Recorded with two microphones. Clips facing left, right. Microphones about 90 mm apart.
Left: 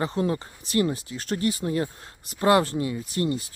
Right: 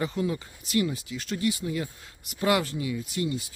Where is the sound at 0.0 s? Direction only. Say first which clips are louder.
Left 3 dB; 40° left (ahead or behind).